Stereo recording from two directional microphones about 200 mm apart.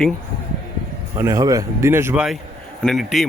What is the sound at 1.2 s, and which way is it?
Speech, 15° right (ahead or behind).